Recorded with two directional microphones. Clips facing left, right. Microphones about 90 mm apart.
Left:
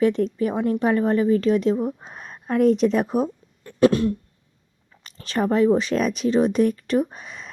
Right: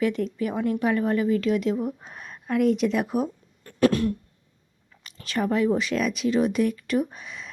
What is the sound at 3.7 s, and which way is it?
Throat clearing, 20° left (ahead or behind).